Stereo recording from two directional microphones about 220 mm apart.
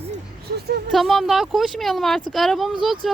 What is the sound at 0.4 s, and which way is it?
Speech, 45° right (ahead or behind).